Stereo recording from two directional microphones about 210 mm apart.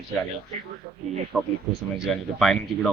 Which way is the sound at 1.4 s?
Centre (ahead or behind).